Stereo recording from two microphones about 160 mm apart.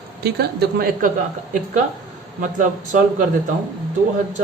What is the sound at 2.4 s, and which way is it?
Speech, 55° right (ahead or behind).